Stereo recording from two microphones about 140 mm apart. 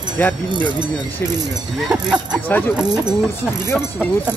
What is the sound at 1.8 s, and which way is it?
Speech, 5° right (ahead or behind).